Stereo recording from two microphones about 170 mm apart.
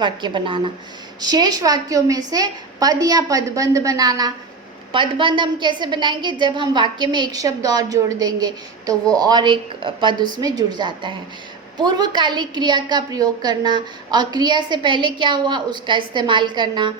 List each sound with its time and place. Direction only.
0.0 s a woman's voice: 30° right (ahead or behind)